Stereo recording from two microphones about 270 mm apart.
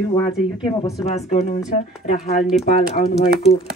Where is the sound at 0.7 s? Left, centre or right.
Centre.